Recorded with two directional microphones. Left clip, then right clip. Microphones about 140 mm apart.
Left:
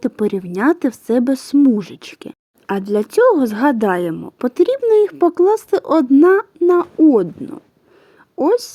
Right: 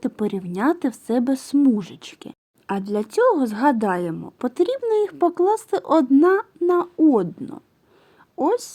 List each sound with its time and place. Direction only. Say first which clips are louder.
0.0 s speech: left 6 dB; 35° left (ahead or behind)